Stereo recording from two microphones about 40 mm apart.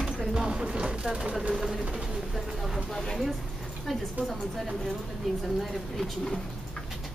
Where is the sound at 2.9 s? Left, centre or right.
Centre.